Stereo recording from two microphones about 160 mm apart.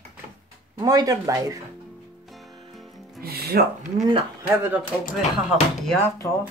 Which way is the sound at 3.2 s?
75° right (ahead or behind).